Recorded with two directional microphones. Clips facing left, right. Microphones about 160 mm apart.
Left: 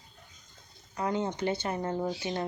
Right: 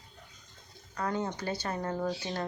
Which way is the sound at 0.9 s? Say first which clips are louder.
Left 2 dB; 20° left (ahead or behind).